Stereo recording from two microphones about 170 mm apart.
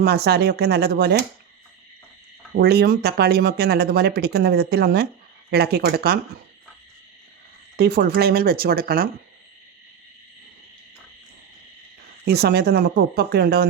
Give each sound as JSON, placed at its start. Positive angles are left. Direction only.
{"t": 0.0, "sound": "speech", "side_deg": -70}
{"t": 2.6, "sound": "speech", "side_deg": -70}
{"t": 7.8, "sound": "speech", "side_deg": -70}
{"t": 12.2, "sound": "speech", "side_deg": -70}